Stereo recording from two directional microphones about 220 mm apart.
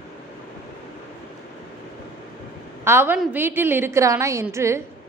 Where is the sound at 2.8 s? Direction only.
10° right (ahead or behind).